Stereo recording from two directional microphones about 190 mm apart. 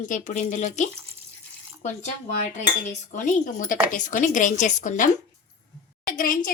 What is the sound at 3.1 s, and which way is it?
A woman's voice, 40° left (ahead or behind).